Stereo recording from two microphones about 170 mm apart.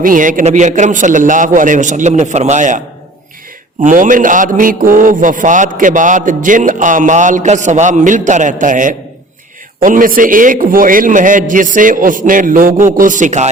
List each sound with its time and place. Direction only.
0.0 s mantra: 50° right (ahead or behind)